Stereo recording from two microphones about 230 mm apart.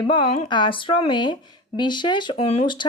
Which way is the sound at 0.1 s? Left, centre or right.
Left.